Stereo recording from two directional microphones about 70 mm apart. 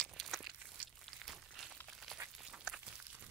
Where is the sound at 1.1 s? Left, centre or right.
Centre.